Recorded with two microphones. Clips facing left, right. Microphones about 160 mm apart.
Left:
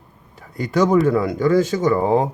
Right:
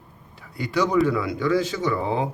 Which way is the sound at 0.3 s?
45° left (ahead or behind).